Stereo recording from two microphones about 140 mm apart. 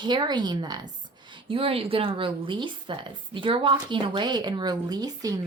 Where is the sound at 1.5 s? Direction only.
40° right (ahead or behind).